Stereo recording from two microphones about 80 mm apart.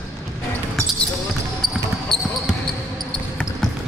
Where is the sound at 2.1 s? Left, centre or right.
Centre.